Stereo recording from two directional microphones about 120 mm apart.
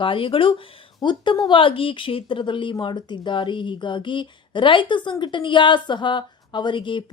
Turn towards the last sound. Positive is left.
turn(degrees=45)  # may be behind; listen again after turning